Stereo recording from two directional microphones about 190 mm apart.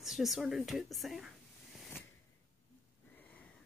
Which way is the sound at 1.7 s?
Centre (ahead or behind).